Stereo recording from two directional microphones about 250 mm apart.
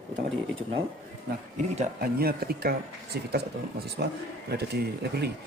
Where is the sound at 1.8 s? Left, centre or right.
Right.